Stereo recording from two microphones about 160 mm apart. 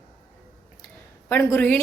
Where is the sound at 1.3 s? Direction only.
15° left (ahead or behind).